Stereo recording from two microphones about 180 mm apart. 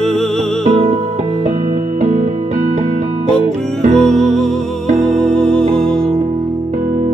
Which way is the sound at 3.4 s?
40° right (ahead or behind).